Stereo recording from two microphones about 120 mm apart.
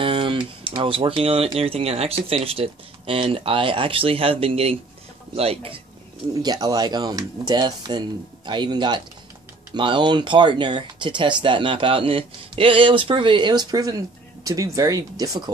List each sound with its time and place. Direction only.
0.0 s speech: 45° right (ahead or behind)
6.4 s speech: 35° right (ahead or behind)